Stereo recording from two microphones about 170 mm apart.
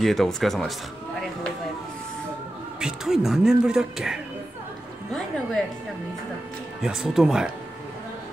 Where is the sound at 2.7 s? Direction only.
5° right (ahead or behind).